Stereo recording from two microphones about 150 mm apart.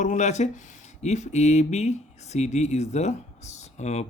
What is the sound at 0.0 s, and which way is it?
Speech, 55° left (ahead or behind).